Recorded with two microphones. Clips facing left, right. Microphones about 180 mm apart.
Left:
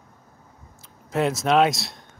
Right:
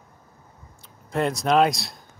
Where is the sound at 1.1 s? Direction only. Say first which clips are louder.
Left 1 dB; centre (ahead or behind).